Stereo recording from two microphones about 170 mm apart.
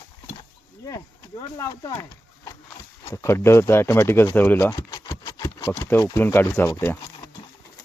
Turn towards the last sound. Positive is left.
turn(degrees=20)  # may be behind; listen again after turning